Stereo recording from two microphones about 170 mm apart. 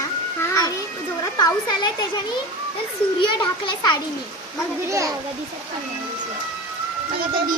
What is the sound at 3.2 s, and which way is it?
Speech, 25° left (ahead or behind).